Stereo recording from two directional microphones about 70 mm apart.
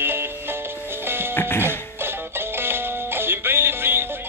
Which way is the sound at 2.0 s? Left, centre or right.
Right.